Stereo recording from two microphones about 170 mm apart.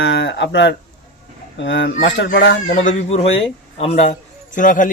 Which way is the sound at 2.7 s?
45° left (ahead or behind).